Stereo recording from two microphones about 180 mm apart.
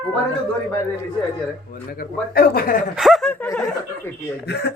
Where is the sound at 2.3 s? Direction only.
55° left (ahead or behind).